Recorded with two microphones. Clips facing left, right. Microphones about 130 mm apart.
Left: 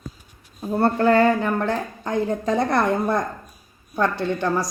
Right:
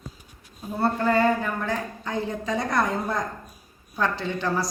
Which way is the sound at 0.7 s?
55° left (ahead or behind).